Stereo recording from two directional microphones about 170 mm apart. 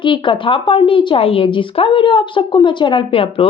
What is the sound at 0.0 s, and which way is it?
Speech, 30° left (ahead or behind).